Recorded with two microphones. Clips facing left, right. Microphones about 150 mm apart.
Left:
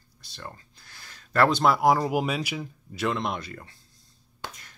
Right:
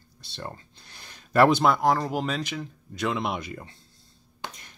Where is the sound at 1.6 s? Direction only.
5° left (ahead or behind).